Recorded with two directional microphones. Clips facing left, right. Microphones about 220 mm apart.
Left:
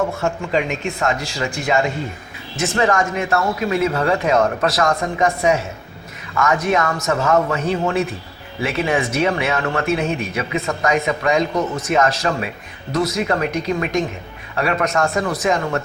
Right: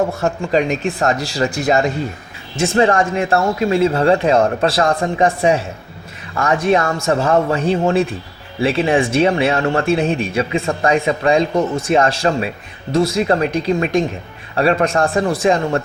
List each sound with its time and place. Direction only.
0.2 s speech: 35° right (ahead or behind)